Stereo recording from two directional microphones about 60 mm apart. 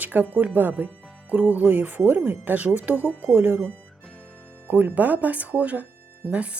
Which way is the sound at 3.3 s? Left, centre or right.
Right.